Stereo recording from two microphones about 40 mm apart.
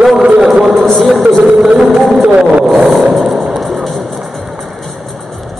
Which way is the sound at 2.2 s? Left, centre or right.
Right.